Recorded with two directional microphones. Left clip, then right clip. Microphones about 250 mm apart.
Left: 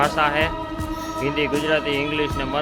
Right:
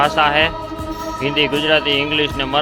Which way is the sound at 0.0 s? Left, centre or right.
Centre.